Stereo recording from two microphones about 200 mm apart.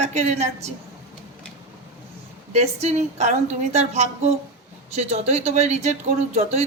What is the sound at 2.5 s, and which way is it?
Speech, 35° right (ahead or behind).